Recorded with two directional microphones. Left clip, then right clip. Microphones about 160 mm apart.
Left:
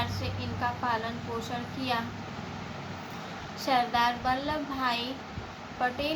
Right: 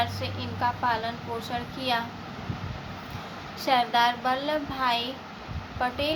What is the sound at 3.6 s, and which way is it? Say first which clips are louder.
A child's voice: right 3 dB; 35° right (ahead or behind).